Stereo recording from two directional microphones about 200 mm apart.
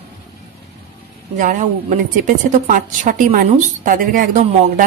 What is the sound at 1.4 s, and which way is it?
Speech, 40° right (ahead or behind).